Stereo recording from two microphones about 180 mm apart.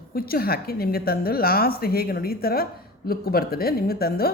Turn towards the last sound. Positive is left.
turn(degrees=55)  # may be behind; listen again after turning